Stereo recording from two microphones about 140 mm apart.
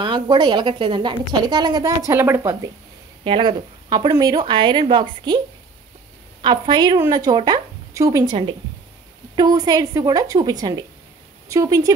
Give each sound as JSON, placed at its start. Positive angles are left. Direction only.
{"t": 0.0, "sound": "a woman's voice", "side_deg": -30}
{"t": 2.1, "sound": "a woman's voice", "side_deg": -15}
{"t": 3.3, "sound": "a woman's voice", "side_deg": -35}
{"t": 6.4, "sound": "a woman's voice", "side_deg": -35}